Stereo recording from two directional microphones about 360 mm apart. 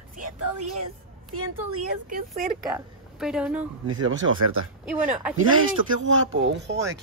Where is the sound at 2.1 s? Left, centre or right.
Right.